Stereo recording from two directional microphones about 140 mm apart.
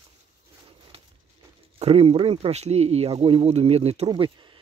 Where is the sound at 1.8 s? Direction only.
45° right (ahead or behind).